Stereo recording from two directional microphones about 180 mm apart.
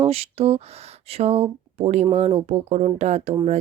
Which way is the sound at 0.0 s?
35° right (ahead or behind).